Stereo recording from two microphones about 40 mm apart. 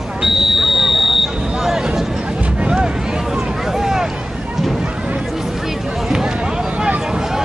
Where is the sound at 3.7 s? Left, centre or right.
Centre.